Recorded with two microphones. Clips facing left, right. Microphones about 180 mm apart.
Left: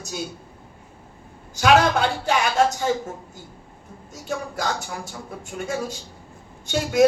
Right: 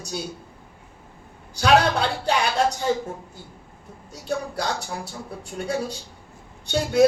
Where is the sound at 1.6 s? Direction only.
35° right (ahead or behind).